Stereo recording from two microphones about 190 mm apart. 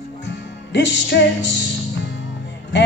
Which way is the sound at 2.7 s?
70° left (ahead or behind).